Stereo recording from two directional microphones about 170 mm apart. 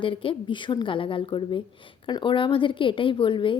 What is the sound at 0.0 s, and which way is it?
A woman's voice, 30° left (ahead or behind).